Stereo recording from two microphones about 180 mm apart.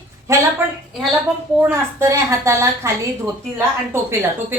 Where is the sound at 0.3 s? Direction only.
15° right (ahead or behind).